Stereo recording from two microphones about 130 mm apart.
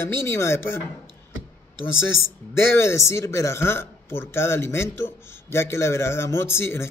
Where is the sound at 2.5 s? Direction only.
20° left (ahead or behind).